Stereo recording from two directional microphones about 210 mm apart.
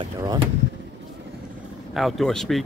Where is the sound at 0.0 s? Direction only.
20° right (ahead or behind).